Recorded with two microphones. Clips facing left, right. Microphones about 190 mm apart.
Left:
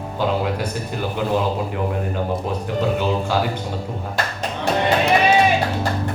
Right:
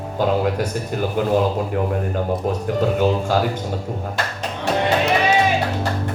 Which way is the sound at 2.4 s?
45° right (ahead or behind).